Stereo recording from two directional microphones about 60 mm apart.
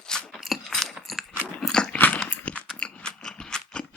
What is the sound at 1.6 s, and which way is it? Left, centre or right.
Biting, centre.